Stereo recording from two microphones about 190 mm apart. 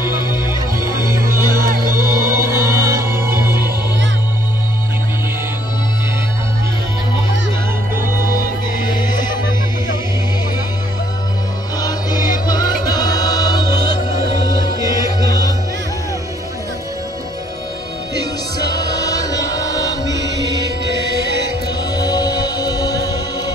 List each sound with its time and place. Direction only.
1.1 s music: 15° right (ahead or behind)
7.9 s music: 10° right (ahead or behind)
9.1 s music: 20° left (ahead or behind)
11.8 s music: 20° left (ahead or behind)
15.0 s music: 20° left (ahead or behind)
18.9 s music: 20° left (ahead or behind)
20.2 s music: 65° right (ahead or behind)
21.9 s music: 20° left (ahead or behind)